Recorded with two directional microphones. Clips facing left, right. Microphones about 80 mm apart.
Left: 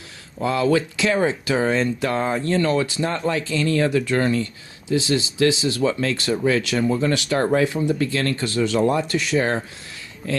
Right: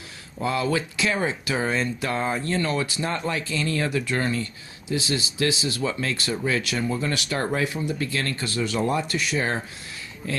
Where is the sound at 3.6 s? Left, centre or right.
Left.